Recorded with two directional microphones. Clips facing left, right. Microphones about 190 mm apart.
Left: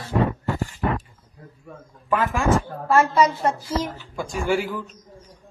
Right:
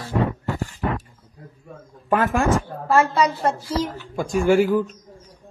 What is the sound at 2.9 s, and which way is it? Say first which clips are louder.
Speech: even; 30° right (ahead or behind).